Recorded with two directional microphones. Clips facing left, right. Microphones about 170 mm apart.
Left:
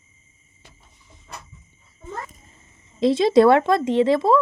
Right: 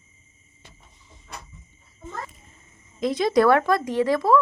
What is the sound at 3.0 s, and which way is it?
Speech, 25° left (ahead or behind).